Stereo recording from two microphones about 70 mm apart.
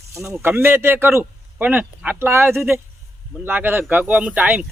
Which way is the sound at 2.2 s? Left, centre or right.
Right.